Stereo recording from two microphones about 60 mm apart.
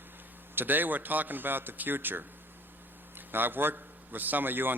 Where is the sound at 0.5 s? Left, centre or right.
Right.